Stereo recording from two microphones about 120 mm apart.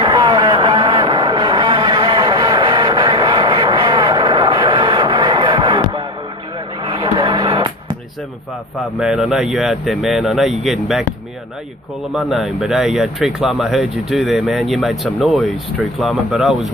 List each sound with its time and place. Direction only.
0.0 s a sound: 40° right (ahead or behind)
9.0 s speech: 5° right (ahead or behind)
12.1 s speech: centre (ahead or behind)